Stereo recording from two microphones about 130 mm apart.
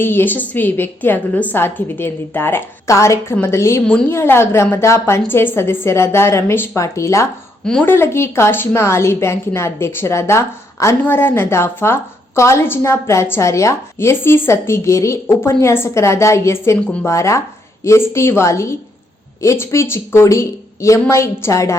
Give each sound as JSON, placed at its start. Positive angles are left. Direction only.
{"t": 0.0, "sound": "a woman's voice", "side_deg": 15}
{"t": 7.6, "sound": "speech", "side_deg": 5}
{"t": 7.9, "sound": "a woman's voice", "side_deg": 20}